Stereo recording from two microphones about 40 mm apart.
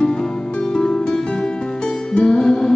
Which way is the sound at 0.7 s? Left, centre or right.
Centre.